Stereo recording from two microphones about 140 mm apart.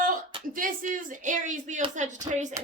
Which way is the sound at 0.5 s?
70° right (ahead or behind).